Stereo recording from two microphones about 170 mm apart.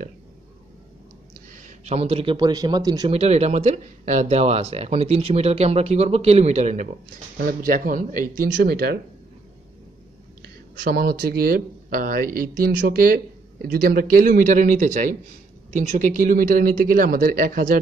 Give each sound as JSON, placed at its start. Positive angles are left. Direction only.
{"t": 1.5, "sound": "speech", "side_deg": -45}
{"t": 3.1, "sound": "speech", "side_deg": -40}
{"t": 7.3, "sound": "speech", "side_deg": -60}
{"t": 10.8, "sound": "speech", "side_deg": -60}